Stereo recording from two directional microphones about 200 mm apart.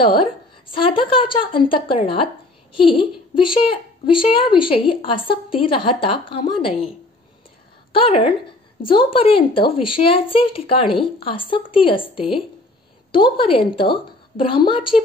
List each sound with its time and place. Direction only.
0.7 s speech: 25° left (ahead or behind)
7.9 s speech: 30° left (ahead or behind)